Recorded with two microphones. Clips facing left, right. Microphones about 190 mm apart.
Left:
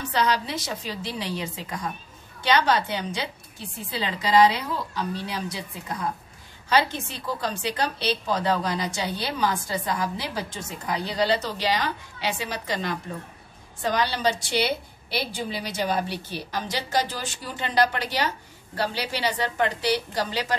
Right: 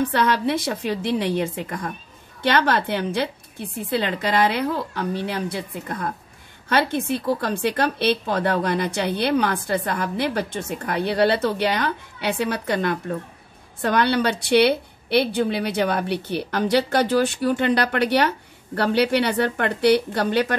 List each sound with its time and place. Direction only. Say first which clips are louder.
0.0 s a woman's voice: right 5 dB; 55° right (ahead or behind)